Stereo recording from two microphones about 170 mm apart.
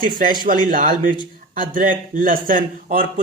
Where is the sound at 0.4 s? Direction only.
55° right (ahead or behind).